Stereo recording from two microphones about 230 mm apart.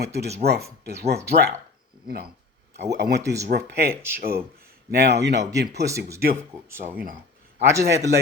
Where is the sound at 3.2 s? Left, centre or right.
Centre.